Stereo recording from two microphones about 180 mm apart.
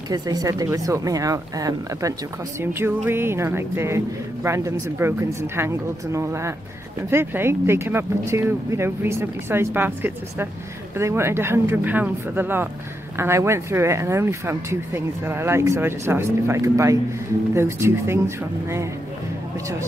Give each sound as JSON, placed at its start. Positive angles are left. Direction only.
{"t": 0.1, "sound": "speech", "side_deg": -20}